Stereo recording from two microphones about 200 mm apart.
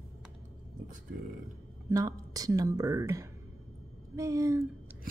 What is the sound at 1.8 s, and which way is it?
Speech, 15° right (ahead or behind).